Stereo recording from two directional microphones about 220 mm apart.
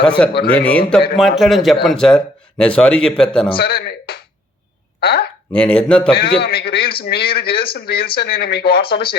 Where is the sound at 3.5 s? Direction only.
45° left (ahead or behind).